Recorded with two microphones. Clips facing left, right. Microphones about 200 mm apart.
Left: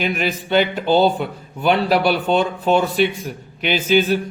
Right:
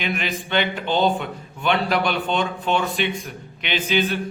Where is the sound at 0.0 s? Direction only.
40° left (ahead or behind).